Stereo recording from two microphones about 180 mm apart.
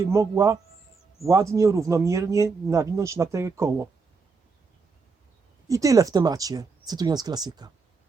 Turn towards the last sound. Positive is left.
turn(degrees=-20)  # may be behind; listen again after turning